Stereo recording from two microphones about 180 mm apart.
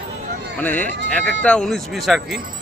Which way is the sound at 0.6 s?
10° left (ahead or behind).